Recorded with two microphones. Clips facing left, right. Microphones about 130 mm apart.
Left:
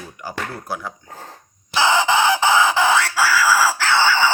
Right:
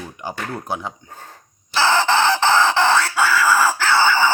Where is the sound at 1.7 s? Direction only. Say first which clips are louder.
Even; 15° left (ahead or behind).